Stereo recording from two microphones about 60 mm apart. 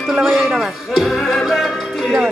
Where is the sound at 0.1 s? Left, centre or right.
Centre.